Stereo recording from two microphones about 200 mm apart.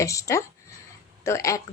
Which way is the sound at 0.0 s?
15° left (ahead or behind).